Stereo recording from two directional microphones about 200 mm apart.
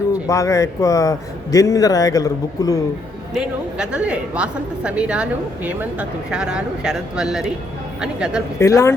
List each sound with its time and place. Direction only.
0.1 s a man's voice: 15° left (ahead or behind)
3.3 s a woman's voice: 5° right (ahead or behind)
8.5 s a man's voice: 15° left (ahead or behind)